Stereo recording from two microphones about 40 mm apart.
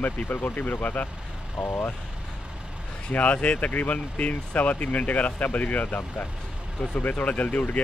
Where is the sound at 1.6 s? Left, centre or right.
Centre.